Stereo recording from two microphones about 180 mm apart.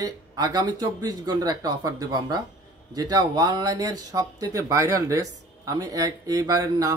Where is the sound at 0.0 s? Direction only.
20° right (ahead or behind).